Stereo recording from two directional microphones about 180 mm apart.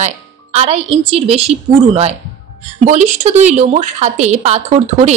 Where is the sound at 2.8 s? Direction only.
40° right (ahead or behind).